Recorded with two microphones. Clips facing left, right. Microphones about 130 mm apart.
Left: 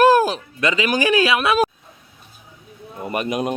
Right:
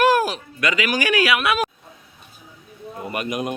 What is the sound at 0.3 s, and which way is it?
Speech, 30° left (ahead or behind).